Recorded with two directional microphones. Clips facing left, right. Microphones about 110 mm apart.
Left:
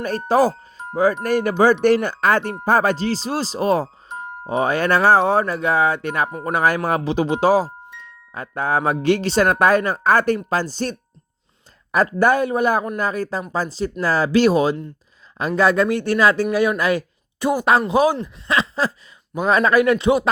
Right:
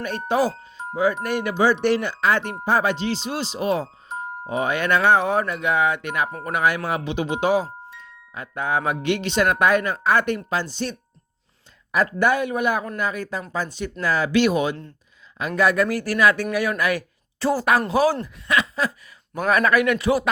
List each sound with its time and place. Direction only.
0.0 s speech: 40° left (ahead or behind)
12.2 s speech: 40° left (ahead or behind); by 18.2 s 20° left (ahead or behind)
18.4 s a sound: 30° left (ahead or behind)
19.5 s speech: 25° left (ahead or behind)